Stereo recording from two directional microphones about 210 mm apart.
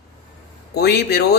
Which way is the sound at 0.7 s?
50° left (ahead or behind).